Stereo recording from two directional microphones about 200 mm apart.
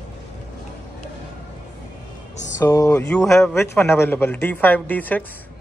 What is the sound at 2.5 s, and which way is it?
Speech, 15° left (ahead or behind).